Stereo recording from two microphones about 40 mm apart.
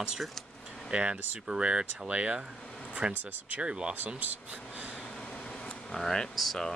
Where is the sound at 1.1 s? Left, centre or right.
Right.